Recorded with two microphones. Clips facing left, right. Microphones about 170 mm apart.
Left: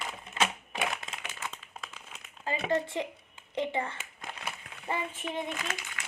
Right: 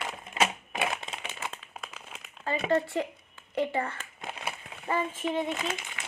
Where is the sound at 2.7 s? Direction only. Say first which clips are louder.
Right 3 dB; 20° left (ahead or behind).